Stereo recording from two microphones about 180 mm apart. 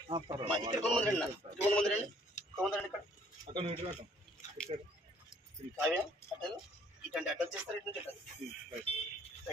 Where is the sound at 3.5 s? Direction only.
30° right (ahead or behind).